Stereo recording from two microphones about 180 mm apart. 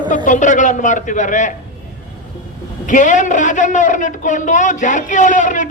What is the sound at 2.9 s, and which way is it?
A man's voice, 45° left (ahead or behind).